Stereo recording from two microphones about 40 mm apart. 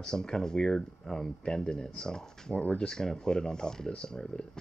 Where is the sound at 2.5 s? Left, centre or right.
Left.